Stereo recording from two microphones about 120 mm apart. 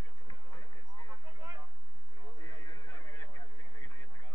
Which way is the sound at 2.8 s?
20° left (ahead or behind).